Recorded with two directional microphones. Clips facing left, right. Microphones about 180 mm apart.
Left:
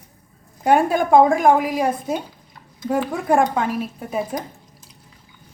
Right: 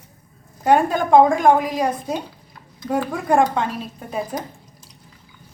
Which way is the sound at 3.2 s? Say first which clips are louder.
Right 1 dB; 5° left (ahead or behind).